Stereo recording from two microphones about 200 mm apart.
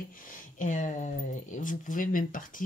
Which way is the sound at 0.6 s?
40° left (ahead or behind).